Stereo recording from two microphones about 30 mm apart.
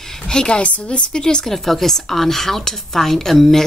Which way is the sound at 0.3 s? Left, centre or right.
Left.